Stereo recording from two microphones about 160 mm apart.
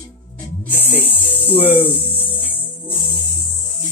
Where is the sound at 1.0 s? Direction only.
10° left (ahead or behind).